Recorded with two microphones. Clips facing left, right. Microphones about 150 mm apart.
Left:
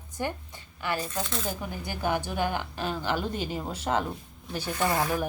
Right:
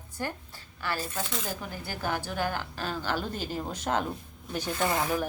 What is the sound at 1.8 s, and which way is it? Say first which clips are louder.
A woman's voice: left 4 dB; 15° left (ahead or behind).